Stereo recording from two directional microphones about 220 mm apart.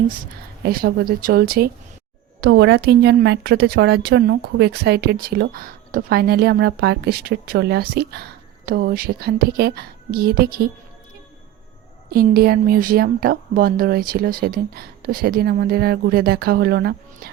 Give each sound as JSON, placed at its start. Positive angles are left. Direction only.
{"t": 0.6, "sound": "speech", "side_deg": -45}
{"t": 12.1, "sound": "speech", "side_deg": -45}